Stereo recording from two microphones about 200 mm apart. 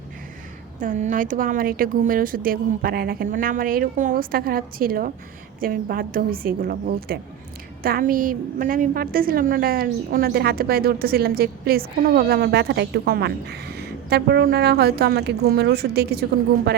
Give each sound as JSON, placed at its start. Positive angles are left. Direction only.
{"t": 0.8, "sound": "a woman's voice", "side_deg": -40}